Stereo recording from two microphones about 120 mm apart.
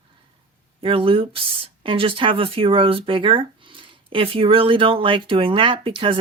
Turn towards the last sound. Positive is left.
turn(degrees=-45)  # may be behind; listen again after turning